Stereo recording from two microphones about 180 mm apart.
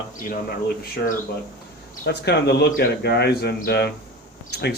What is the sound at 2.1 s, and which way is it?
Speech, 65° left (ahead or behind).